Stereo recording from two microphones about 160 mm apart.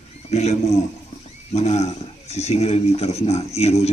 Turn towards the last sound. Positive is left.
turn(degrees=40)  # may be behind; listen again after turning